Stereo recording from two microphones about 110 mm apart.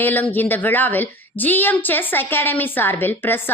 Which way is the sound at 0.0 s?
15° left (ahead or behind).